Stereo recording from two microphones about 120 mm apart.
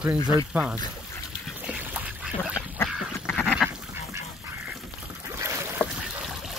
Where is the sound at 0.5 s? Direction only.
10° right (ahead or behind).